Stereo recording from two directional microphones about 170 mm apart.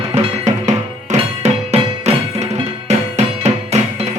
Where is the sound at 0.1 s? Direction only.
40° right (ahead or behind).